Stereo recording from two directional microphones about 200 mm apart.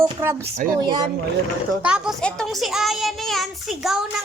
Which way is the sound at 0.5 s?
45° right (ahead or behind).